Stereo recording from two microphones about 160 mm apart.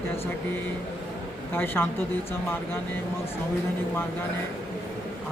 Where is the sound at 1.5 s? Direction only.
15° left (ahead or behind).